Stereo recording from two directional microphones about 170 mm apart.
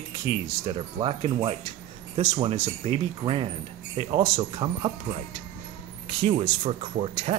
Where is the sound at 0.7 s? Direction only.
35° right (ahead or behind).